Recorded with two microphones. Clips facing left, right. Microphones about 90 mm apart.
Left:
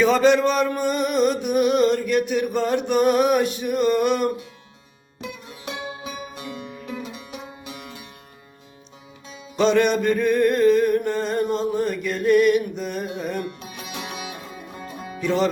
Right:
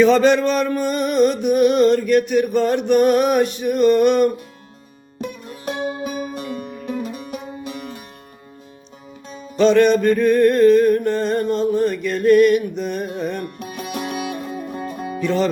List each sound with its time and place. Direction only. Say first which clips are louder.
0.0 s male singing: right 3 dB; 5° left (ahead or behind)
5.2 s music: right 6 dB; 45° right (ahead or behind)
9.6 s a sound: right 5 dB; 15° left (ahead or behind)
13.1 s male singing: right 3 dB; 5° left (ahead or behind)
13.6 s music: right 7 dB; 50° right (ahead or behind)